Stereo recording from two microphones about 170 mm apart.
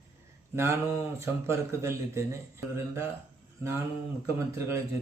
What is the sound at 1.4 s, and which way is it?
A man's voice, 15° right (ahead or behind).